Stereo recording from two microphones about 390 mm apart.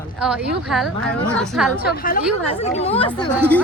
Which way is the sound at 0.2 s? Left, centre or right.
Centre.